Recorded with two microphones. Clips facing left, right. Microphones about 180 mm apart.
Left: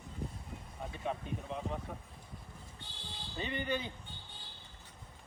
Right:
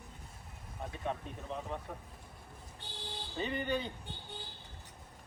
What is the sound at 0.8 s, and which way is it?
Speech, centre (ahead or behind).